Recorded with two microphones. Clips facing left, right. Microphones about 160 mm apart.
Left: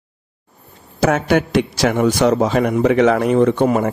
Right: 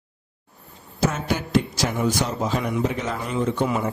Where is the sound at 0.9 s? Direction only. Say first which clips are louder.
Left 9 dB; 70° left (ahead or behind).